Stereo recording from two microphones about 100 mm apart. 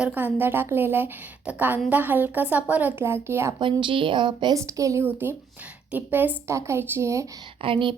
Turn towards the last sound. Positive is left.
turn(degrees=-60)  # may be behind; listen again after turning